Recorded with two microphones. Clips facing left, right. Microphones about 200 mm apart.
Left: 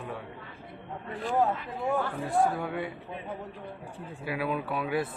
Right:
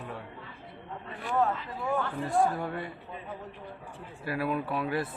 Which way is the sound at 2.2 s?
5° left (ahead or behind).